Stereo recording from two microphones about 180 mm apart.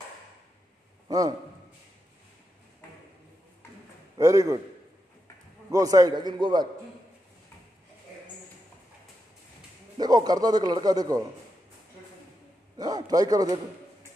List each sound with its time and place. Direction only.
1.0 s a sound: 20° right (ahead or behind)
4.2 s a man's voice: 20° right (ahead or behind)
5.7 s a man's voice: 20° right (ahead or behind)
9.9 s a man's voice: 20° right (ahead or behind)
12.7 s a man's voice: 20° right (ahead or behind)